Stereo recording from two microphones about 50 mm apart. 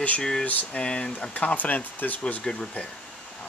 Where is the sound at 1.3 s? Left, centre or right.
Left.